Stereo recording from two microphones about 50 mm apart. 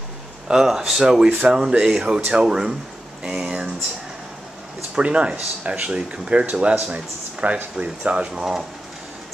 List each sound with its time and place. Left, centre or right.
0.5 s speech: centre
4.9 s speech: right